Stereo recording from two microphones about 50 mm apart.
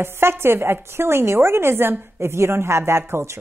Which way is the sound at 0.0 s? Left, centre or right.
Right.